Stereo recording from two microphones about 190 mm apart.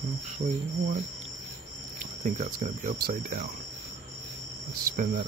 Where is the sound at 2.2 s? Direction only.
45° right (ahead or behind).